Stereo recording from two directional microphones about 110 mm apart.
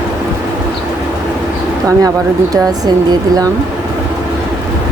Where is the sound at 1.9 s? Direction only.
30° right (ahead or behind).